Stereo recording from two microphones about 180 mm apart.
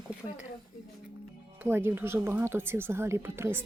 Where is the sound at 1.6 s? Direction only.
10° right (ahead or behind).